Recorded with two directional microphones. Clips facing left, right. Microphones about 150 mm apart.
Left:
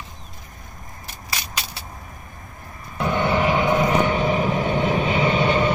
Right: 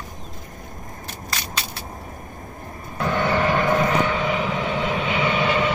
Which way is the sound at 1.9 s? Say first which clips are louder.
Right 4 dB; 40° right (ahead or behind).